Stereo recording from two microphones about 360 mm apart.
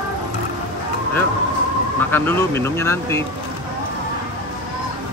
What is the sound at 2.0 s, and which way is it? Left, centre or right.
Speech, centre.